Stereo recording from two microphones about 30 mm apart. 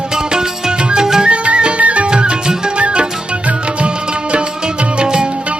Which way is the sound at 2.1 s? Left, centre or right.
Right.